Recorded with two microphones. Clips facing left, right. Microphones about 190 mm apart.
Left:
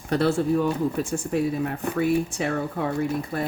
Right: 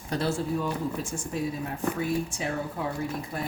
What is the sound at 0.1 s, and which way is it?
Speech, 65° left (ahead or behind).